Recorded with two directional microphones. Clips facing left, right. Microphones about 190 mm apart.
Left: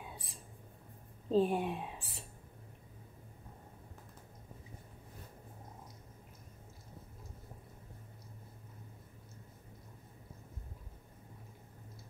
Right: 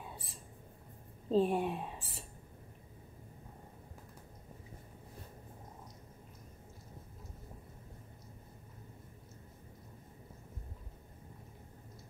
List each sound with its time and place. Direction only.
1.3 s a woman's voice: centre (ahead or behind)